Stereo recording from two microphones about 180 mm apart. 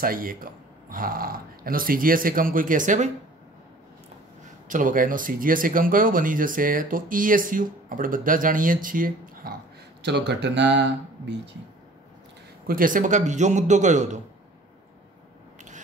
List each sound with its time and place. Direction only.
0.0 s speech: 55° right (ahead or behind)
4.6 s speech: 45° right (ahead or behind)
10.0 s speech: 70° right (ahead or behind)
12.6 s a man's voice: 50° right (ahead or behind)